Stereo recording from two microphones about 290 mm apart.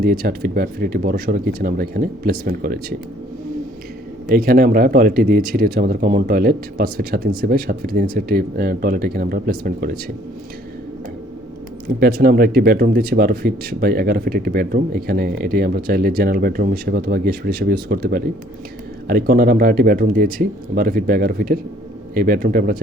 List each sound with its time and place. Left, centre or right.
0.0 s speech: right
4.3 s speech: right
11.9 s a man's voice: right